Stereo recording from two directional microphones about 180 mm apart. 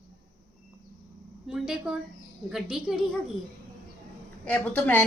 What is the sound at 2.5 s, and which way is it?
Speech, 5° right (ahead or behind).